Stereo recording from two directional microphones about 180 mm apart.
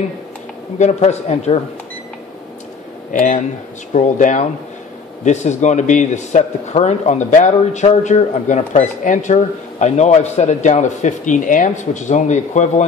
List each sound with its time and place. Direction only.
0.7 s a man's voice: 40° left (ahead or behind)
3.1 s a man's voice: 45° left (ahead or behind)